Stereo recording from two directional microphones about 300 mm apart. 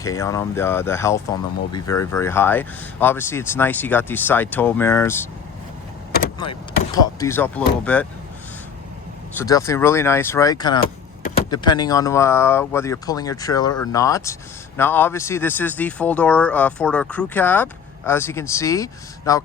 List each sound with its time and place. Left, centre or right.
0.0 s speech: centre
6.1 s vehicle: left
6.9 s speech: centre
9.4 s speech: centre
10.8 s vehicle: left
11.5 s speech: centre